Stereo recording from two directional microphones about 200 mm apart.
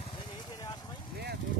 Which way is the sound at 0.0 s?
20° left (ahead or behind).